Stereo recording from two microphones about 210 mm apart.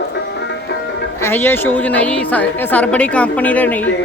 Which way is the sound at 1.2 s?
10° left (ahead or behind).